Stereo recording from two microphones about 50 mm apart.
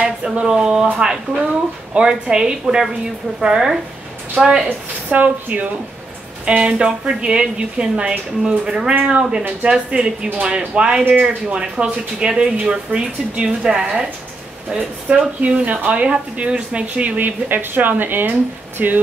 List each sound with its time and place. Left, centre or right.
0.0 s a woman's voice: right
4.4 s a woman's voice: centre
4.6 s a woman's voice: right
6.4 s a woman's voice: right
17.5 s a woman's voice: right